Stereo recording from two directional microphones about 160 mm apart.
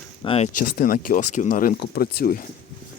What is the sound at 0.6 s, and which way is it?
Speech, 60° left (ahead or behind).